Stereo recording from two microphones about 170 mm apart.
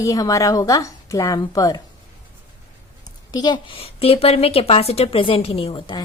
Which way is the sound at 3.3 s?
25° left (ahead or behind).